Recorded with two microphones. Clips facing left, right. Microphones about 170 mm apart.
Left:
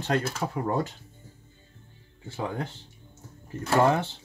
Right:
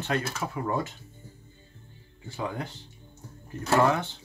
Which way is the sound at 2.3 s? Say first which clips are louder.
Left 1 dB; 30° left (ahead or behind).